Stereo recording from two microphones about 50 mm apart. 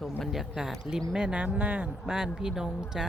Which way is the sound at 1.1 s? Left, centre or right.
Right.